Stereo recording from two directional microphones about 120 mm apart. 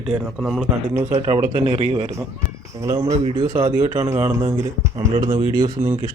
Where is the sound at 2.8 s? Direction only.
35° right (ahead or behind).